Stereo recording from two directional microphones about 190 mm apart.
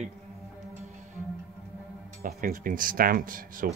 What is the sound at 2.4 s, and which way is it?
Speech, 45° right (ahead or behind).